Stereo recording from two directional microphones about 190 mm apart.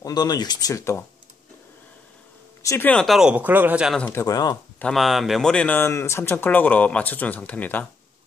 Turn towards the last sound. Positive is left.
turn(degrees=10)  # may be behind; listen again after turning